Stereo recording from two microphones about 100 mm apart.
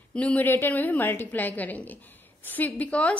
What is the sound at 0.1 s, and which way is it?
A woman's voice, 15° left (ahead or behind).